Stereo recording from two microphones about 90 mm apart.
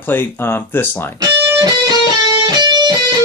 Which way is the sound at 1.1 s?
45° right (ahead or behind).